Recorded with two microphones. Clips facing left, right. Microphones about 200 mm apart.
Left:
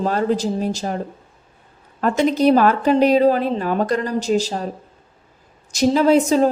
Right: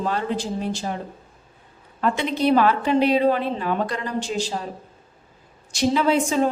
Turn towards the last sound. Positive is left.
turn(degrees=40)  # may be behind; listen again after turning